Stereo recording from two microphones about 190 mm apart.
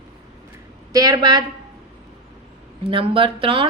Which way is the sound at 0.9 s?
20° right (ahead or behind).